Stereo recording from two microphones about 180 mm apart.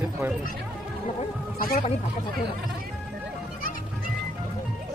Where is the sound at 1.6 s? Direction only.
50° left (ahead or behind).